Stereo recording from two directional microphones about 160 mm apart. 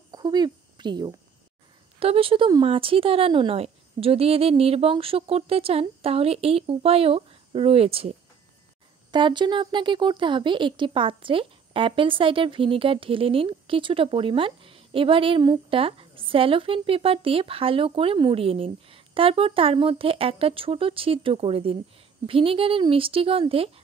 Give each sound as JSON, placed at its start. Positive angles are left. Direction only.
{"t": 0.1, "sound": "a sound", "side_deg": -25}
{"t": 2.0, "sound": "speech", "side_deg": -35}
{"t": 9.1, "sound": "speech", "side_deg": -30}